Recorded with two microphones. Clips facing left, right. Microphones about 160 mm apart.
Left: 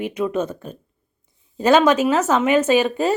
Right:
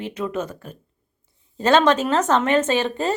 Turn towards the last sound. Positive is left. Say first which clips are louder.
# left 4 dB
turn(degrees=10)  # may be behind; listen again after turning